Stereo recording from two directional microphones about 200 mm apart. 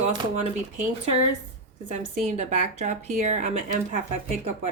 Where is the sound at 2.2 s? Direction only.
35° right (ahead or behind).